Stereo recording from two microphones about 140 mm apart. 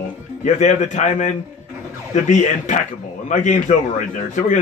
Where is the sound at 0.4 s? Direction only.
60° left (ahead or behind).